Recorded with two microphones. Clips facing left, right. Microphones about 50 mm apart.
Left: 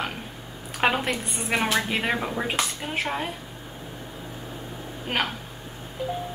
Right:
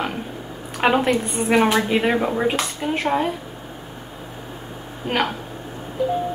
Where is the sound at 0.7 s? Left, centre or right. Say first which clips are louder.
Right 6 dB; centre.